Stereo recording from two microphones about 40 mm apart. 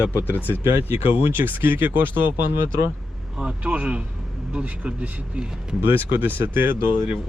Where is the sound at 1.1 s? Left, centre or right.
Right.